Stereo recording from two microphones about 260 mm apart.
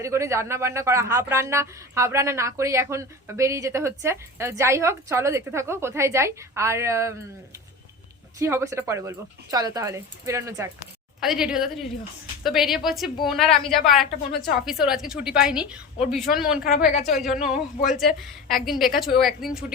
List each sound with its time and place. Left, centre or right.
0.0 s speech: centre
8.4 s a woman's voice: centre
16.6 s a woman's voice: left
17.9 s a woman's voice: centre